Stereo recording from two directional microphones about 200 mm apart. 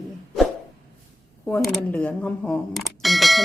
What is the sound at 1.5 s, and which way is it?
Speech, 5° left (ahead or behind).